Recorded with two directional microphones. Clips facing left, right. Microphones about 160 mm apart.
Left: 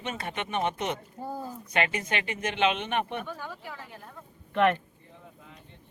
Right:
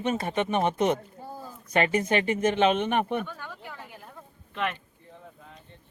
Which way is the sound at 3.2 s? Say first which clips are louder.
Right 1 dB; 5° left (ahead or behind).